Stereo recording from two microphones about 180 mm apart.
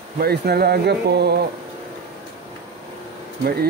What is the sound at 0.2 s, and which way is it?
Speech, 60° right (ahead or behind).